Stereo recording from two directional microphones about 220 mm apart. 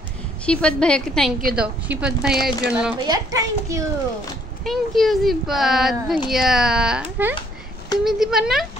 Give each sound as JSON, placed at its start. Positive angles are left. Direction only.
{"t": 0.5, "sound": "a child's voice", "side_deg": 5}
{"t": 4.6, "sound": "a child's voice", "side_deg": 0}